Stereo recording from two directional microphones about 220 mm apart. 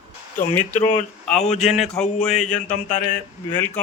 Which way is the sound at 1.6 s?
Centre (ahead or behind).